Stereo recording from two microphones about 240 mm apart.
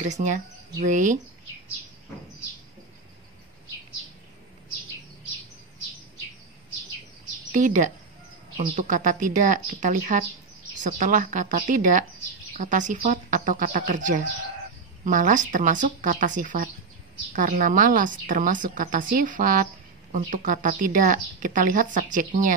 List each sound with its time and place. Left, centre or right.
0.1 s a woman's voice: right
7.5 s a woman's voice: right